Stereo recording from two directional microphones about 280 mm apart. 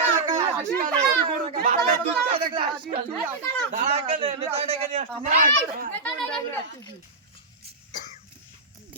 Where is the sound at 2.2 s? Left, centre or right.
Centre.